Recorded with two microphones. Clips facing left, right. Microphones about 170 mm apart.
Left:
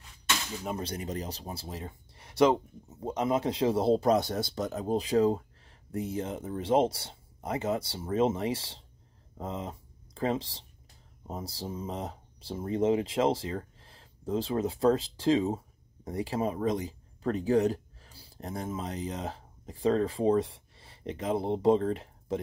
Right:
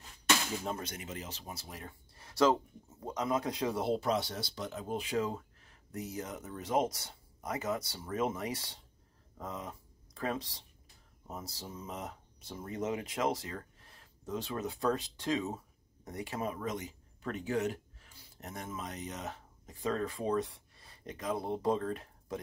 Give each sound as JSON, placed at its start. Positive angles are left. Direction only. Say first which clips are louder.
{"t": 0.7, "sound": "speech", "louder": "left 7 dB", "side_deg": 35}